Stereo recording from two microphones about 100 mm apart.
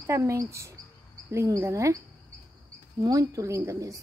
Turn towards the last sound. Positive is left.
turn(degrees=-30)  # may be behind; listen again after turning